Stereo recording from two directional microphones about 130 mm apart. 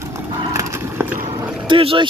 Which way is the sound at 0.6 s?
20° right (ahead or behind).